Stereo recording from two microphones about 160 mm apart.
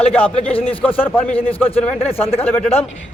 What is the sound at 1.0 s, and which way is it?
Speech, 10° left (ahead or behind).